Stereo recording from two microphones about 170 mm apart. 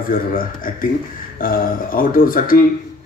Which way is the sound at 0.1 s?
55° left (ahead or behind).